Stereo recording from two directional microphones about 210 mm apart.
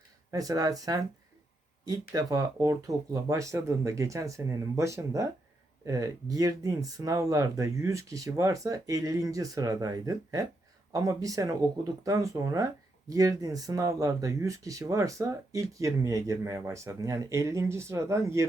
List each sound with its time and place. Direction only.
0.3 s speech: 15° right (ahead or behind)